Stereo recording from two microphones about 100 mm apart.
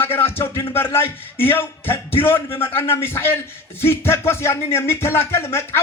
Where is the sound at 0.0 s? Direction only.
20° left (ahead or behind).